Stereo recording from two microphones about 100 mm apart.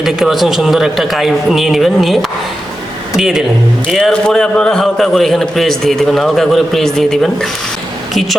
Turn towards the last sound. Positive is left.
turn(degrees=5)  # may be behind; listen again after turning